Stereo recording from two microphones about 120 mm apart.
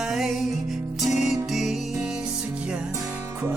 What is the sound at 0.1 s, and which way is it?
Music, centre (ahead or behind).